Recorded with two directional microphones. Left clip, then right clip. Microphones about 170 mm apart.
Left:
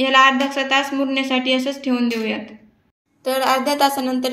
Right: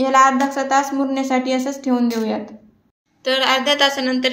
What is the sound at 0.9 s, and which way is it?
A woman's voice, 35° right (ahead or behind).